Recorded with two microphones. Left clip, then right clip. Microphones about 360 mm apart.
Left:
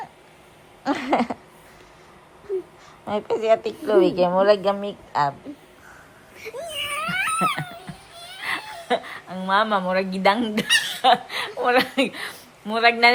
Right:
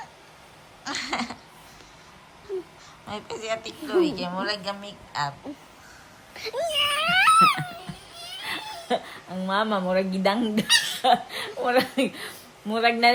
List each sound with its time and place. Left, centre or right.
0.9 s a woman's voice: centre
3.1 s a woman's voice: centre
6.3 s baby cry: right
7.1 s a sound: centre
11.0 s a woman's voice: centre